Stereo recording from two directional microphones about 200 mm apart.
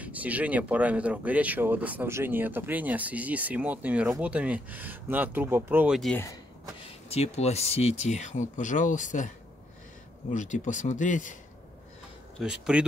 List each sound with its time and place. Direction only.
0.0 s speech: 5° right (ahead or behind)
6.8 s speech: 30° left (ahead or behind)
10.3 s speech: 40° left (ahead or behind)
12.4 s speech: 5° right (ahead or behind)